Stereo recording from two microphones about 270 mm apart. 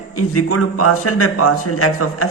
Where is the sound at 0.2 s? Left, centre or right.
Left.